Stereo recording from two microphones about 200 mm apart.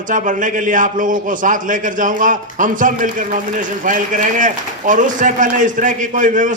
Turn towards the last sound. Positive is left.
turn(degrees=-40)  # may be behind; listen again after turning